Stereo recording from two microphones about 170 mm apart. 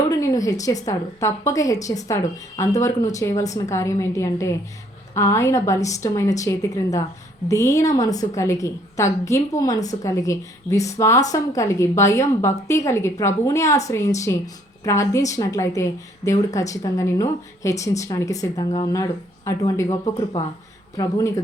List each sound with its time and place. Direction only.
0.1 s a woman's voice: 20° left (ahead or behind)